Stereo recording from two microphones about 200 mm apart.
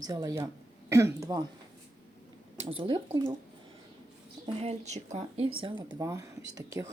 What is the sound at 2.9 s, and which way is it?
Speech, 20° right (ahead or behind).